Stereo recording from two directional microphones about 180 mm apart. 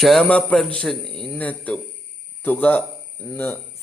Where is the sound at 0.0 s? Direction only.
Centre (ahead or behind).